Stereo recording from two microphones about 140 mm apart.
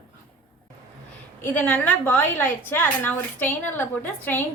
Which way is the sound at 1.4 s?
10° left (ahead or behind).